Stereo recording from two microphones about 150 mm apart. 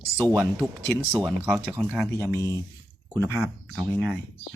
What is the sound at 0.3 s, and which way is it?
Speech, 10° right (ahead or behind).